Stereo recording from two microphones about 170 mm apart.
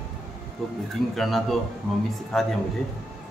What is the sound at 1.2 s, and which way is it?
Speech, centre (ahead or behind).